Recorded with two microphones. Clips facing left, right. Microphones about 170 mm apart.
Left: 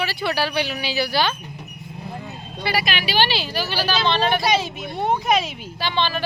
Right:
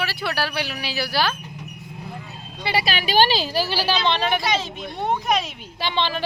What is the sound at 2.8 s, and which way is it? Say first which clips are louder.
Speech: right 6 dB; 40° right (ahead or behind).